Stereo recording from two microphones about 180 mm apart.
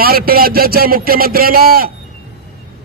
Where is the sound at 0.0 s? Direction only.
55° right (ahead or behind).